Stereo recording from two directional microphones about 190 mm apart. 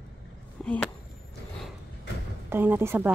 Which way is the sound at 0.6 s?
Centre (ahead or behind).